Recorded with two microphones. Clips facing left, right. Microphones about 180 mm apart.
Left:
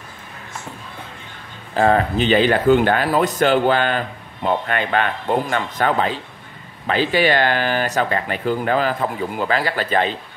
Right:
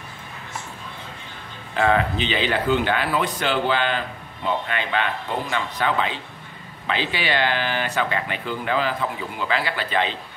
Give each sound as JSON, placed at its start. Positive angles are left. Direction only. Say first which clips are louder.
{"t": 1.7, "sound": "speech", "louder": "left 4 dB", "side_deg": 40}